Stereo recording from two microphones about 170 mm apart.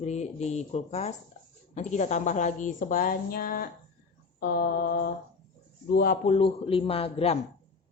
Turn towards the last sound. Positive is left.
turn(degrees=35)  # may be behind; listen again after turning